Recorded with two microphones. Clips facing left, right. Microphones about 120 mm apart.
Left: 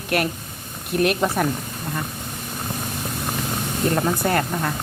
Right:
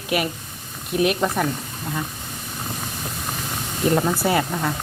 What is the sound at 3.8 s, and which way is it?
Speech, 5° right (ahead or behind).